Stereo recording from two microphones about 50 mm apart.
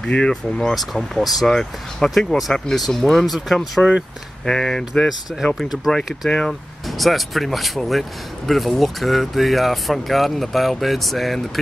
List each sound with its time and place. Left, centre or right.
0.0 s speech: centre
3.8 s speech: centre
5.0 s speech: centre
5.9 s speech: centre